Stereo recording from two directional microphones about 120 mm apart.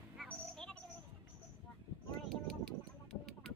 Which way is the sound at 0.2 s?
5° left (ahead or behind).